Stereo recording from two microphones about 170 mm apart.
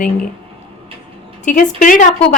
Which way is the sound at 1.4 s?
50° left (ahead or behind).